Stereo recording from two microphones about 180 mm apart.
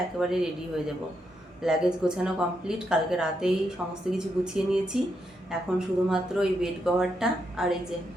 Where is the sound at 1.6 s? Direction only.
5° right (ahead or behind).